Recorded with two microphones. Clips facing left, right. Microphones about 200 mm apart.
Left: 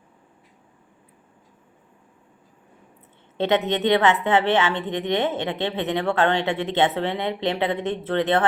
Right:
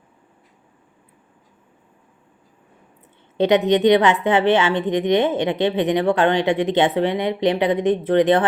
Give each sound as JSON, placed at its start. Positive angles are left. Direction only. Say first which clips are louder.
{"t": 3.3, "sound": "a woman's voice", "louder": "right 6 dB", "side_deg": -15}